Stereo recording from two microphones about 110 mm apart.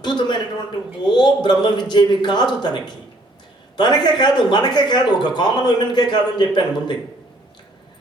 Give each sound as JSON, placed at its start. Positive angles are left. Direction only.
{"t": 0.0, "sound": "a man's voice", "side_deg": 45}
{"t": 3.8, "sound": "a man's voice", "side_deg": 40}